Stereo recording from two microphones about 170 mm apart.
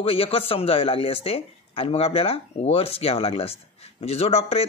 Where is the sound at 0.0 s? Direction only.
35° left (ahead or behind).